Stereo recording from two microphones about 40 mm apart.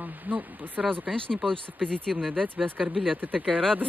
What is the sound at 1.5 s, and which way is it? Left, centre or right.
Speech, centre.